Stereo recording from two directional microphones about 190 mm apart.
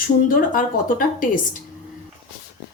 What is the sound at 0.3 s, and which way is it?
Speech, 50° left (ahead or behind).